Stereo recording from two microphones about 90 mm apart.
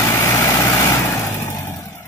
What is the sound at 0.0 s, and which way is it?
Vehicle, 30° left (ahead or behind).